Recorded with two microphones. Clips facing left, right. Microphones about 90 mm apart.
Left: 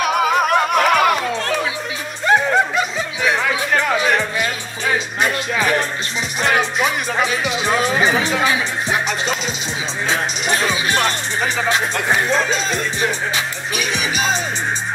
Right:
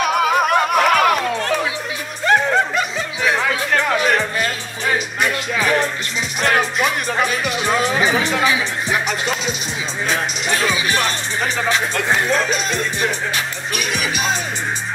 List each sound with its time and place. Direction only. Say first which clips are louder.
0.0 s music: even; centre (ahead or behind)
2.2 s music: left 1 dB; 5° left (ahead or behind)
5.5 s music: even; 5° left (ahead or behind)
10.7 s music: left 1 dB; 25° left (ahead or behind)
11.4 s music: left 1 dB; 5° left (ahead or behind)
12.3 s speech: even; 25° left (ahead or behind)